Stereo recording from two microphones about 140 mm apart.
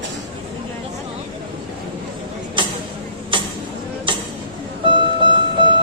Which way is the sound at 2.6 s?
35° right (ahead or behind).